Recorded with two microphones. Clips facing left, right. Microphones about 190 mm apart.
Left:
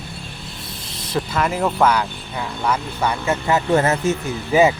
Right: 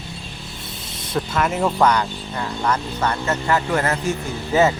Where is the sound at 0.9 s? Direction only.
Centre (ahead or behind).